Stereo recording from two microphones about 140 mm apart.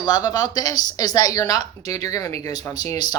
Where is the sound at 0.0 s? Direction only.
30° left (ahead or behind).